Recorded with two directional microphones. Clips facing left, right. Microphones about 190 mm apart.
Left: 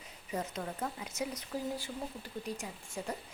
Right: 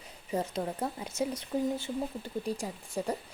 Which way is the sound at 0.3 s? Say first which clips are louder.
Right 5 dB; 30° right (ahead or behind).